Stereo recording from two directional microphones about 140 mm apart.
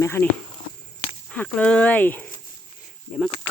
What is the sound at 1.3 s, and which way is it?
Speech, 10° left (ahead or behind).